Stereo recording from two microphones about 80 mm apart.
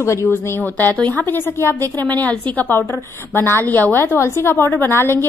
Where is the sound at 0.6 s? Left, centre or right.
Left.